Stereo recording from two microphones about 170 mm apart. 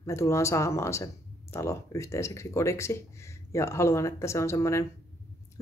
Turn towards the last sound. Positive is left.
turn(degrees=15)  # may be behind; listen again after turning